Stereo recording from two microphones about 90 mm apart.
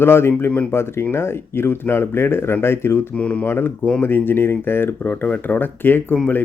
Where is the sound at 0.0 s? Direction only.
25° left (ahead or behind).